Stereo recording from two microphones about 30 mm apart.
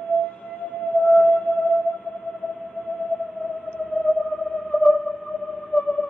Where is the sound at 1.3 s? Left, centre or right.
Left.